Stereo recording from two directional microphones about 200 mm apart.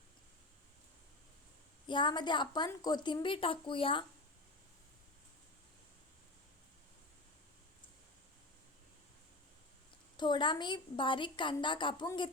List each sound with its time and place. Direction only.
1.9 s a woman's voice: 25° left (ahead or behind)
10.2 s a woman's voice: 25° left (ahead or behind)